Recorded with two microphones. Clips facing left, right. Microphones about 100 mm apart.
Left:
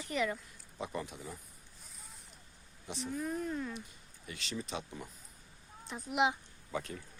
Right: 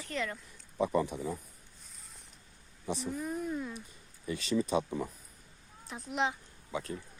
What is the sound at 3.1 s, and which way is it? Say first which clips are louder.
Speech: left 1 dB; 5° right (ahead or behind).